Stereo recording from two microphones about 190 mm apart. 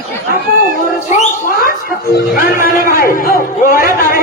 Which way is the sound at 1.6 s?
50° left (ahead or behind).